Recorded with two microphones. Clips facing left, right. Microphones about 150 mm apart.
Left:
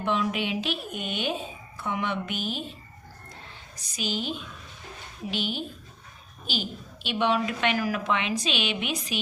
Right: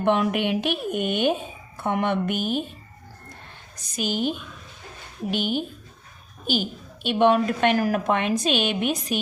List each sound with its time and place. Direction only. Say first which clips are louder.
0.0 s speech: right 6 dB; 60° right (ahead or behind)
3.9 s speech: right 6 dB; 50° right (ahead or behind)